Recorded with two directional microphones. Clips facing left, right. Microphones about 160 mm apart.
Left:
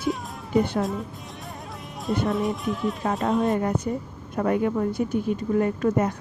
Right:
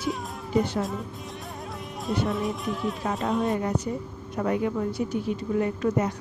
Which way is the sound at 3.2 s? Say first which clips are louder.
Left 3 dB; 45° left (ahead or behind).